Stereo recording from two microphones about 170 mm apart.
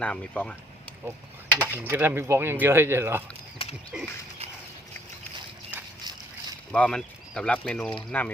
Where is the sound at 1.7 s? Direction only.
10° right (ahead or behind).